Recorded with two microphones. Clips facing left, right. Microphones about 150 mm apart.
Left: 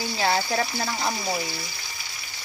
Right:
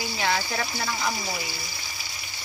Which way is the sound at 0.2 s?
35° left (ahead or behind).